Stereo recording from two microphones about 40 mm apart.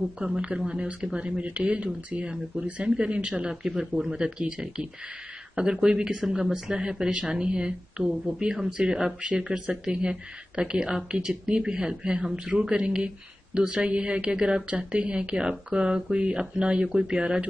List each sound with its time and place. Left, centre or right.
0.2 s speech: right
3.6 s speech: centre
4.4 s speech: right